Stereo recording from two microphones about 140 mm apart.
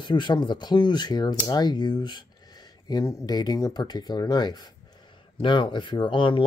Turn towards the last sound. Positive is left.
turn(degrees=35)  # may be behind; listen again after turning